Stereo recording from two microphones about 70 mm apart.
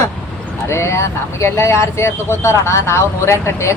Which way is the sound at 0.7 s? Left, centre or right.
Left.